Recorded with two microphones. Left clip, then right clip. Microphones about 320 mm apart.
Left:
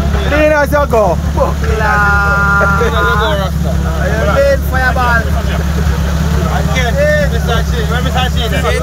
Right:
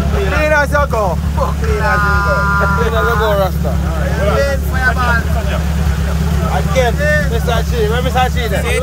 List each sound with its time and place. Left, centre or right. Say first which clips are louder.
0.4 s vehicle: left 3 dB; left
3.1 s vehicle: even; centre